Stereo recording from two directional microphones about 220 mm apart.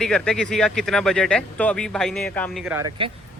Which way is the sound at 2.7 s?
15° right (ahead or behind).